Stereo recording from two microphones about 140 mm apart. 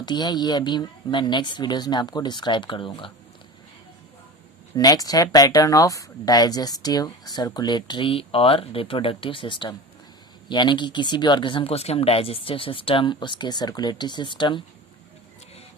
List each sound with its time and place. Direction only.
0.0 s speech: 30° left (ahead or behind)
4.8 s speech: 25° left (ahead or behind)